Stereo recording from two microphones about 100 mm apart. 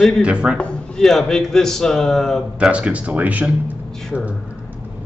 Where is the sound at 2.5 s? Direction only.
10° right (ahead or behind).